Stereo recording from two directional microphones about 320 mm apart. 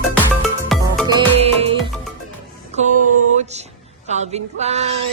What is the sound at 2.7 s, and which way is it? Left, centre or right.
Mantra, right.